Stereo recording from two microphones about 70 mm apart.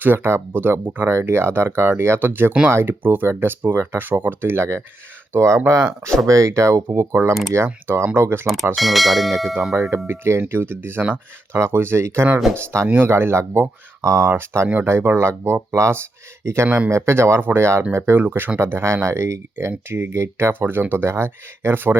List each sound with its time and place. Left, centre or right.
0.0 s speech: right
8.7 s bell: centre
10.1 s speech: right
16.6 s speech: centre
16.9 s speech: right